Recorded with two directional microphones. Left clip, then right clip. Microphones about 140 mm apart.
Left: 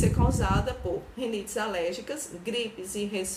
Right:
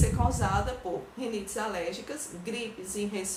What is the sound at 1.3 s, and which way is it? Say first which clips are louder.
A woman's voice: left 2 dB; 25° left (ahead or behind).